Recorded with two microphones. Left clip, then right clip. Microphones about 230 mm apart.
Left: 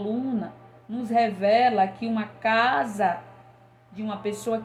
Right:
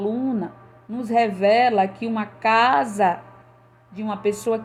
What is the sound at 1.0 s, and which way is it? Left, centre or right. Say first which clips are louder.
A woman's voice: right 4 dB; right.